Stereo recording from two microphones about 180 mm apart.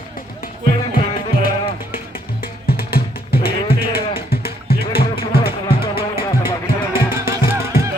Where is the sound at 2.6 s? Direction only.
55° left (ahead or behind).